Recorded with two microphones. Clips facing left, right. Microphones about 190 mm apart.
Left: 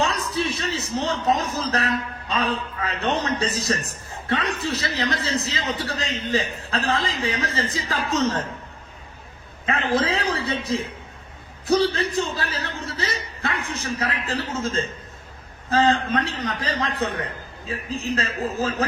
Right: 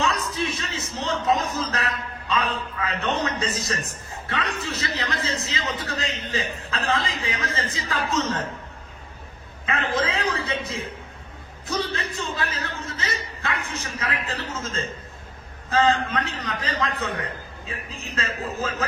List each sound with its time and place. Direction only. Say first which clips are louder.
0.0 s a sound: left 2 dB; 35° left (ahead or behind)
1.2 s a man's voice: left 1 dB; 35° left (ahead or behind)
9.6 s a man's voice: left 3 dB; 35° left (ahead or behind)